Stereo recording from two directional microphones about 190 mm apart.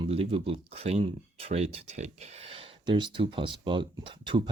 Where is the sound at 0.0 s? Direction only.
30° right (ahead or behind).